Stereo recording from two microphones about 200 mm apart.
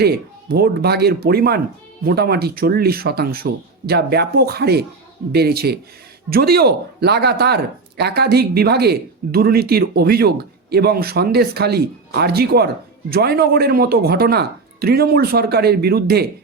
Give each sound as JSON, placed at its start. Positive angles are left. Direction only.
{"t": 0.0, "sound": "speech", "side_deg": -50}